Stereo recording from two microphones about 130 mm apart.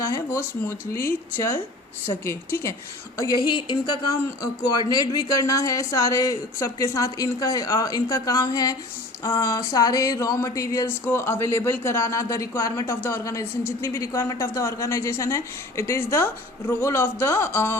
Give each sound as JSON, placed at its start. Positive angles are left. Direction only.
{"t": 0.3, "sound": "a woman's voice", "side_deg": 20}
{"t": 3.2, "sound": "speech", "side_deg": 35}
{"t": 4.9, "sound": "a woman's voice", "side_deg": 30}